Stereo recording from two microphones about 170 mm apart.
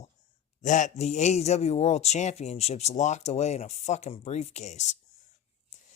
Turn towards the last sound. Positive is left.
turn(degrees=40)  # may be behind; listen again after turning